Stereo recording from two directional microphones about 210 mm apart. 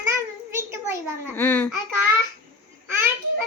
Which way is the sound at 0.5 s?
15° right (ahead or behind).